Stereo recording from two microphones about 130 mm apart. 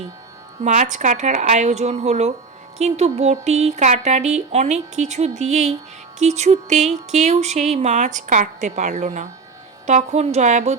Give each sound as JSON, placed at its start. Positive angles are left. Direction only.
{"t": 0.6, "sound": "music", "side_deg": -70}